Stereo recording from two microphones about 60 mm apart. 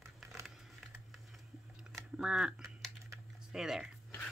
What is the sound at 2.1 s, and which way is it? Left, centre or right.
Speech, centre.